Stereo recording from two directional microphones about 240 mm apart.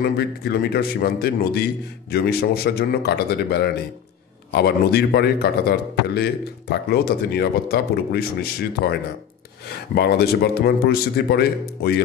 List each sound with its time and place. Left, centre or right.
0.0 s speech: left
9.9 s speech: left